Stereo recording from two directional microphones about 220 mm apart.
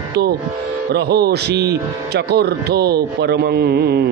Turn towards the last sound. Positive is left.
turn(degrees=-45)  # may be behind; listen again after turning